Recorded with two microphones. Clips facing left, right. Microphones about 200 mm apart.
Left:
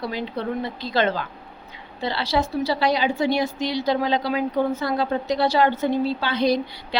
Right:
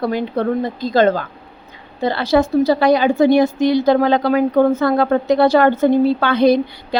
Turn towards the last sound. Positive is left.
turn(degrees=-55)  # may be behind; listen again after turning